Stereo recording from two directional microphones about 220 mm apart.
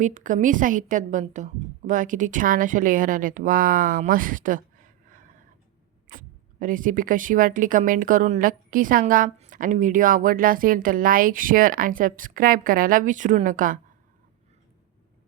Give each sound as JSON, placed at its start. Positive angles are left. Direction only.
{"t": 0.0, "sound": "speech", "side_deg": -35}